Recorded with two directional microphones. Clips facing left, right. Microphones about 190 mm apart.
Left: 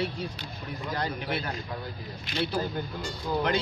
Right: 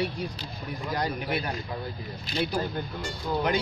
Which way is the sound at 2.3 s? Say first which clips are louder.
Right 1 dB; 30° right (ahead or behind).